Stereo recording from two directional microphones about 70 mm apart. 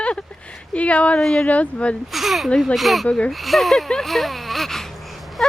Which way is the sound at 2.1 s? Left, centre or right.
Centre.